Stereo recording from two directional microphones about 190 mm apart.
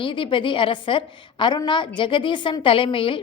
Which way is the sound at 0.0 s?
25° left (ahead or behind).